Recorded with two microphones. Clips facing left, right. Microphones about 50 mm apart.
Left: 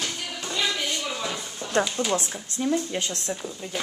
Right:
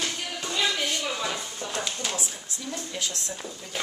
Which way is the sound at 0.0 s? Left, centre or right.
Centre.